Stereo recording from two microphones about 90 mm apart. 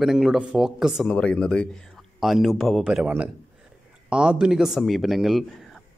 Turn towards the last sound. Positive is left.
turn(degrees=0)  # may be behind; listen again after turning